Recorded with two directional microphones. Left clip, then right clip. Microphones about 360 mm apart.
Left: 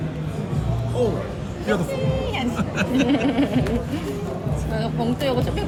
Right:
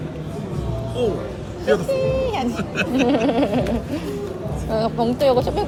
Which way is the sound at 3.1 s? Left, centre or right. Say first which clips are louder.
Right 3 dB; centre.